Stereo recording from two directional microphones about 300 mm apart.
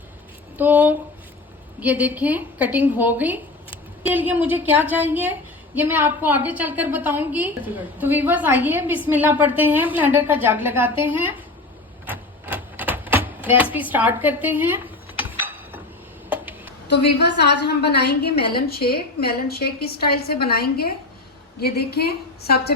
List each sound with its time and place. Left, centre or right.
0.5 s a woman's voice: centre
12.0 s typewriter: centre
13.7 s a woman's voice: centre
16.9 s a woman's voice: left